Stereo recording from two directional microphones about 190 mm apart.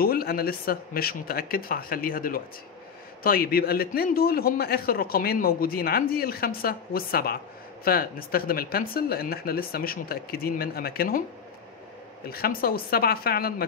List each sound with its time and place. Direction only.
0.0 s a man's voice: 55° left (ahead or behind)
12.3 s a man's voice: 50° left (ahead or behind)